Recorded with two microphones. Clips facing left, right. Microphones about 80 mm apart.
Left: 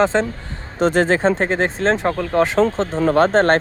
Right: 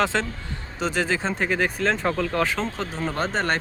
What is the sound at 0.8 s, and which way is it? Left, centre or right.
Speech, left.